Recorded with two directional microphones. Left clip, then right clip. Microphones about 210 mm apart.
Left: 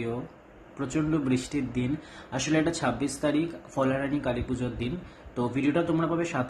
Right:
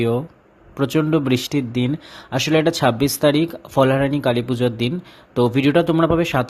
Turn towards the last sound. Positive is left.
turn(degrees=-45)  # may be behind; listen again after turning